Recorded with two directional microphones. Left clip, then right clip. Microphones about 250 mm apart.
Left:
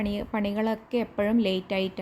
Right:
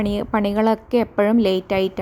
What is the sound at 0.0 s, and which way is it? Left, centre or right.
A woman's voice, right.